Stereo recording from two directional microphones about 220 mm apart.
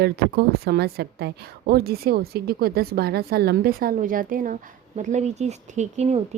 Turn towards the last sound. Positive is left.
turn(degrees=-30)  # may be behind; listen again after turning